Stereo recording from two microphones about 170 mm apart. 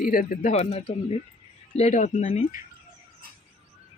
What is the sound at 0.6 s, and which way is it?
Speech, 35° left (ahead or behind).